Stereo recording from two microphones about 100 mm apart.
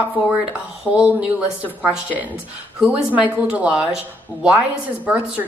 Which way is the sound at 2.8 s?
10° right (ahead or behind).